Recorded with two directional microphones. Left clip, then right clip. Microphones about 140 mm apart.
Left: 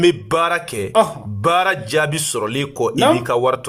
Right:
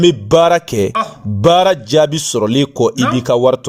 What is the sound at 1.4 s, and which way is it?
A man's voice, 45° right (ahead or behind).